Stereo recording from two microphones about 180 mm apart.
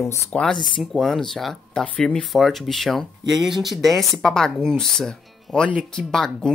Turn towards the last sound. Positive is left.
turn(degrees=5)  # may be behind; listen again after turning